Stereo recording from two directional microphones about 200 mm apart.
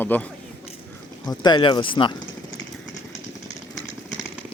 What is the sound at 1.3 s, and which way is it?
Speech, 20° left (ahead or behind).